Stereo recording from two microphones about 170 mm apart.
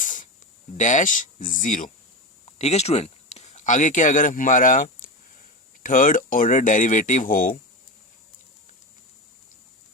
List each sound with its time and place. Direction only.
0.0 s a sound: 50° left (ahead or behind)
0.8 s speech: 45° left (ahead or behind)
2.6 s speech: 40° left (ahead or behind)